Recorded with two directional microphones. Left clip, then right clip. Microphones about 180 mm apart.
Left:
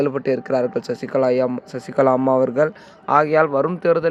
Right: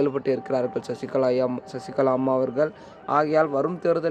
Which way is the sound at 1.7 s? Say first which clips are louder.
Left 7 dB; 35° left (ahead or behind).